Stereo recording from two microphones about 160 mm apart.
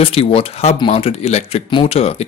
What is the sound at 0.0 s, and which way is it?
Speech, 35° left (ahead or behind).